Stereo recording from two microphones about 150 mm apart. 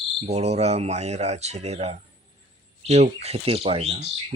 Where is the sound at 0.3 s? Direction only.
45° right (ahead or behind).